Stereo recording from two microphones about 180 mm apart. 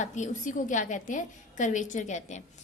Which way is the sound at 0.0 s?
45° left (ahead or behind).